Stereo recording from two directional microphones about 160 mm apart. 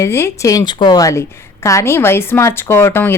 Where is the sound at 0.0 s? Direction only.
15° left (ahead or behind).